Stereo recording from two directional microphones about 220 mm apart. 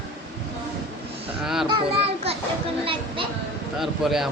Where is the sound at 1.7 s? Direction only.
25° right (ahead or behind).